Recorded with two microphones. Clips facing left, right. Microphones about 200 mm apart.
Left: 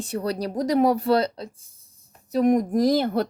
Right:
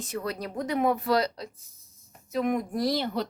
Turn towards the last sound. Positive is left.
turn(degrees=50)  # may be behind; listen again after turning